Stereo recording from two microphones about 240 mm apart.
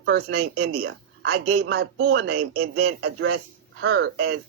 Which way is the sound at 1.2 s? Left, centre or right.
Right.